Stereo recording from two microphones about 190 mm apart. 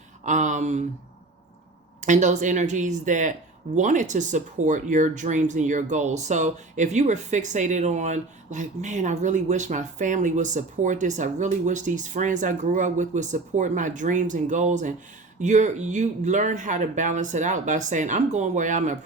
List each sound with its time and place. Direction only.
0.3 s speech: 40° right (ahead or behind)
2.0 s speech: 40° right (ahead or behind)